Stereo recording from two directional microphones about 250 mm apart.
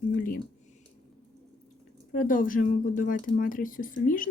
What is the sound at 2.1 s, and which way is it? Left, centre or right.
Speech, left.